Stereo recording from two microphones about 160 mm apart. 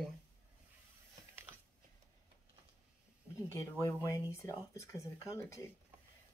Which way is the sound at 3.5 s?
15° left (ahead or behind).